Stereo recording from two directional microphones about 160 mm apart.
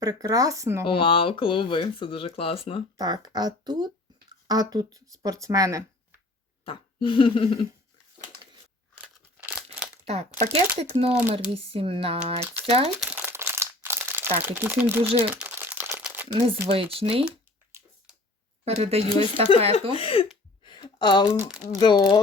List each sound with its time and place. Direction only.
0.0 s speech: 20° right (ahead or behind)
0.9 s speech: 35° left (ahead or behind)
3.0 s speech: 25° right (ahead or behind)
6.7 s speech: 30° left (ahead or behind)
9.5 s crumpling: 5° right (ahead or behind)
10.8 s speech: 40° right (ahead or behind)
13.0 s crumpling: 10° right (ahead or behind)
16.3 s speech: 35° right (ahead or behind)
17.2 s a sound: 5° right (ahead or behind)
18.6 s speech: 40° right (ahead or behind)
19.1 s speech: 30° left (ahead or behind)
20.7 s a sound: 25° left (ahead or behind)
21.2 s speech: 5° right (ahead or behind)
21.8 s speech: 30° left (ahead or behind)